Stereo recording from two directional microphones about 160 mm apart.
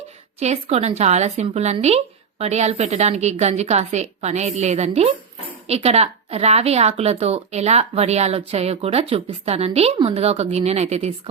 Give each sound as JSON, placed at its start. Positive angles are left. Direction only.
{"t": 0.3, "sound": "a woman's voice", "side_deg": -40}